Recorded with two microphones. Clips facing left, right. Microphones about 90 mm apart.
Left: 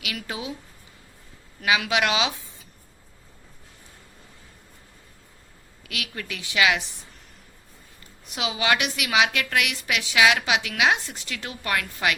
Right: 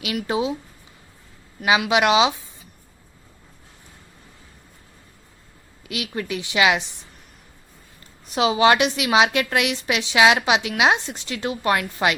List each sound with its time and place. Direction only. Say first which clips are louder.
0.0 s a woman's voice: right 9 dB; 25° right (ahead or behind)
1.6 s a woman's voice: right 5 dB; 25° right (ahead or behind)
5.9 s a woman's voice: right 7 dB; 25° right (ahead or behind)
8.3 s a woman's voice: right 8 dB; 35° right (ahead or behind)